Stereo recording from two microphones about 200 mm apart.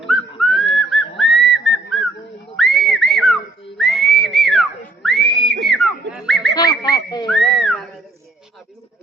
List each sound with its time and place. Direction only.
0.0 s whistling: centre (ahead or behind)
2.6 s whistling: centre (ahead or behind)
5.6 s a sound: centre (ahead or behind)
6.5 s whistling: 20° left (ahead or behind)
7.3 s whistling: centre (ahead or behind)